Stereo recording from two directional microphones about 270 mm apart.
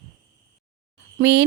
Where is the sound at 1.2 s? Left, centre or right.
Right.